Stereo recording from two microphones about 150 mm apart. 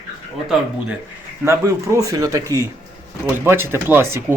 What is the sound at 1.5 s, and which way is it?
Speech, 20° right (ahead or behind).